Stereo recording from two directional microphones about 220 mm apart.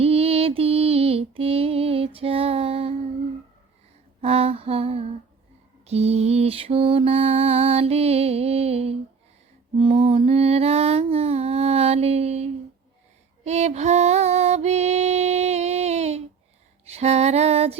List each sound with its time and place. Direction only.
0.0 s female singing: 25° right (ahead or behind)
4.2 s a sound: 25° right (ahead or behind)
5.8 s mantra: 30° right (ahead or behind)
13.4 s music: 30° right (ahead or behind)
16.8 s female singing: 30° right (ahead or behind)